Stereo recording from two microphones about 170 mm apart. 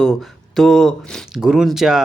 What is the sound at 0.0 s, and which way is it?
Speech, centre (ahead or behind).